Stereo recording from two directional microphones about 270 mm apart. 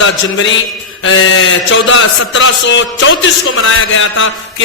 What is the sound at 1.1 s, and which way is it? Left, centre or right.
A man's voice, left.